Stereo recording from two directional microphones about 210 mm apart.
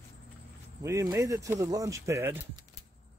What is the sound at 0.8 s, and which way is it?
Speech, 15° right (ahead or behind).